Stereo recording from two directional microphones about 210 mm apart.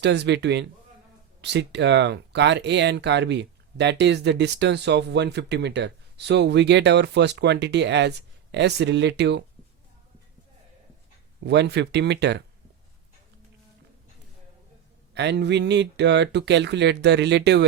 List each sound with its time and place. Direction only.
0.0 s speech: 55° right (ahead or behind)
11.4 s speech: 55° right (ahead or behind)
15.1 s speech: 55° right (ahead or behind)